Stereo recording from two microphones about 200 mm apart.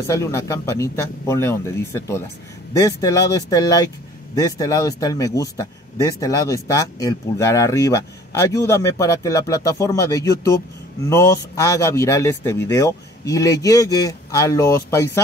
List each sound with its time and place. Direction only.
0.0 s speech: 15° left (ahead or behind)